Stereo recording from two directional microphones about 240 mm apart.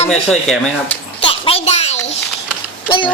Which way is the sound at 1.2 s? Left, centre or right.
Left.